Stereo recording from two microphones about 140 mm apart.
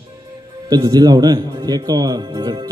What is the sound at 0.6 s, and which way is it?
A man's voice, 30° right (ahead or behind).